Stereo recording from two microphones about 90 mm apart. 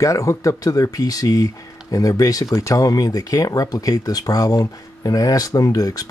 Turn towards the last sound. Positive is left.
turn(degrees=45)  # may be behind; listen again after turning